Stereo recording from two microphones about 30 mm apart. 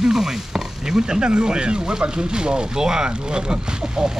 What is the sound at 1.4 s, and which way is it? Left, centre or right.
Speech, right.